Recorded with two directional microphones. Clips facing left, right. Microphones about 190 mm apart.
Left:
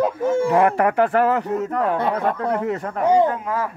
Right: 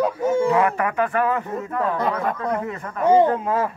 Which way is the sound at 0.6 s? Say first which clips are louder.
Left 4 dB; 55° left (ahead or behind).